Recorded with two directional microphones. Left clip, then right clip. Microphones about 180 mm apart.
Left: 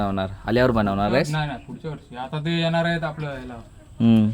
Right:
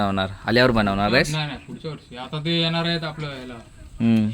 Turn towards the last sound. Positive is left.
turn(degrees=25)  # may be behind; listen again after turning